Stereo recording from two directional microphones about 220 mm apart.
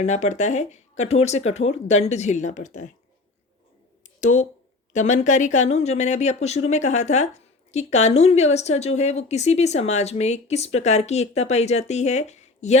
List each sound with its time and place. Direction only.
0.0 s speech: 30° left (ahead or behind)
4.2 s speech: 30° left (ahead or behind)